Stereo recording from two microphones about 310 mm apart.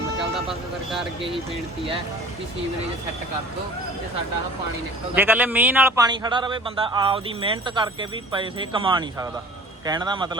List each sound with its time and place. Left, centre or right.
5.1 s a man's voice: centre